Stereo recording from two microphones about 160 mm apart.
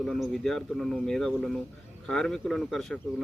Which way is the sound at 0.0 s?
Centre (ahead or behind).